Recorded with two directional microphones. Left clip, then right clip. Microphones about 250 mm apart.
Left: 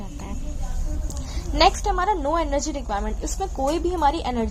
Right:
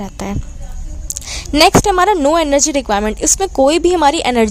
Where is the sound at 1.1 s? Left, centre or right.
Right.